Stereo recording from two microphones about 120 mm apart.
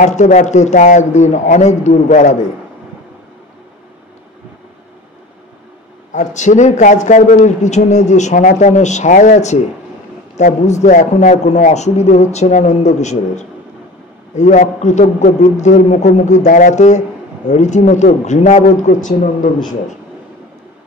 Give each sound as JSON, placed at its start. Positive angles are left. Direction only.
{"t": 0.0, "sound": "a man's voice", "side_deg": 90}
{"t": 6.1, "sound": "a man's voice", "side_deg": 85}
{"t": 14.3, "sound": "a man's voice", "side_deg": 90}